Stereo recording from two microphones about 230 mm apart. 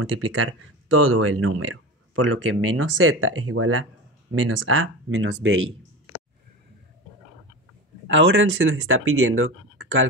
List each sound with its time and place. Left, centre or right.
0.0 s speech: right
8.1 s speech: right